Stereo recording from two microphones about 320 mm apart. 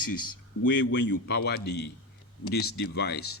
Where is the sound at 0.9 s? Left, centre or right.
Left.